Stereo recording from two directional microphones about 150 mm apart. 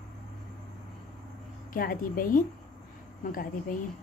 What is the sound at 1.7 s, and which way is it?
Speech, 70° left (ahead or behind).